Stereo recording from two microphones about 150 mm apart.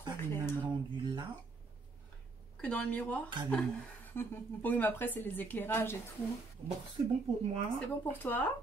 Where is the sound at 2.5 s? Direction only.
5° left (ahead or behind).